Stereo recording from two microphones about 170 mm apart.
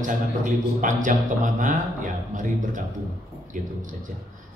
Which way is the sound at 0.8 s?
50° right (ahead or behind).